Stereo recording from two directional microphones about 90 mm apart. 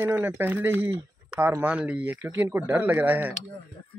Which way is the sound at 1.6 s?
15° right (ahead or behind).